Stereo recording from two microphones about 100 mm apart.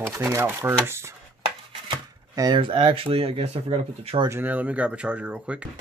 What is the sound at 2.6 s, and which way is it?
Speech, 60° right (ahead or behind).